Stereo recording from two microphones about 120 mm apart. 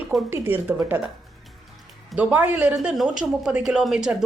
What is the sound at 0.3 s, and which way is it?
Speech, 15° right (ahead or behind).